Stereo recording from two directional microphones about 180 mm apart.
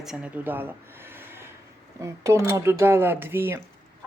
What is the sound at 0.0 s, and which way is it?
Speech, 5° right (ahead or behind).